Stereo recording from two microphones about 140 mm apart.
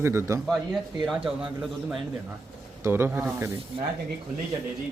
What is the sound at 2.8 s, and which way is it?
Speech, 15° right (ahead or behind).